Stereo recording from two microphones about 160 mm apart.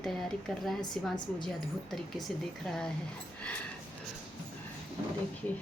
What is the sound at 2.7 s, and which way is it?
Speech, 5° left (ahead or behind).